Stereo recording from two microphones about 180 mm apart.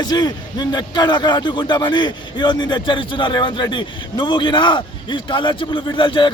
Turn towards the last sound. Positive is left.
turn(degrees=30)  # may be behind; listen again after turning